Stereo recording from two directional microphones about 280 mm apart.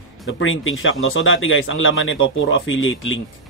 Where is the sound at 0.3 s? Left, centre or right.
Left.